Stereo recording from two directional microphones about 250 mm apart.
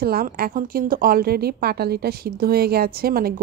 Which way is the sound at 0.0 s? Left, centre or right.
Right.